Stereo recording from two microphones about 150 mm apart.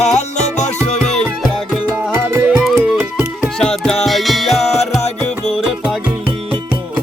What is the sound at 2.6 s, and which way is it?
Music, centre (ahead or behind).